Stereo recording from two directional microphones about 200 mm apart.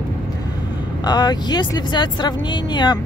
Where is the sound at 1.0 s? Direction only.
20° left (ahead or behind).